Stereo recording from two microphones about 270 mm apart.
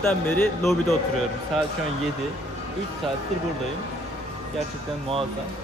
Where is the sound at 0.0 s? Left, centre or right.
Centre.